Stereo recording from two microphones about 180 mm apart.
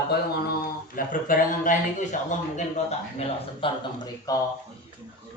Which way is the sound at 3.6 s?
30° left (ahead or behind).